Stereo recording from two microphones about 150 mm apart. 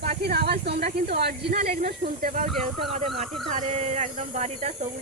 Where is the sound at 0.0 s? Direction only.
90° right.